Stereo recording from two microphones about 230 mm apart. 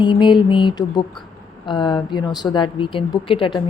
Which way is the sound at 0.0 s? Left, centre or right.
Centre.